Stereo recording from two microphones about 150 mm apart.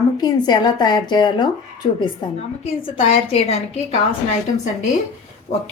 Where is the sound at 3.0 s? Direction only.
40° left (ahead or behind).